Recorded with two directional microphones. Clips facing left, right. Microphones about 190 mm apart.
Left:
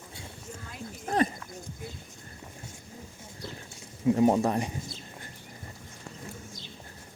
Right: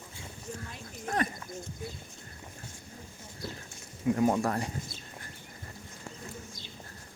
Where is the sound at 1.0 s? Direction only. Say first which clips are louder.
Left 5 dB; 25° left (ahead or behind).